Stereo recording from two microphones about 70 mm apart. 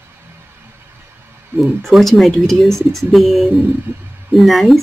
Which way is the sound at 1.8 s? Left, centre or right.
Centre.